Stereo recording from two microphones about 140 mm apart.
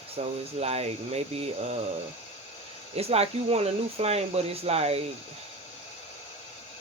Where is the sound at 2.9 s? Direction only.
45° right (ahead or behind).